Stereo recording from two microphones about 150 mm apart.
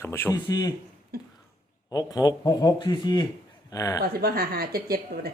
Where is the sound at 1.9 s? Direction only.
25° left (ahead or behind).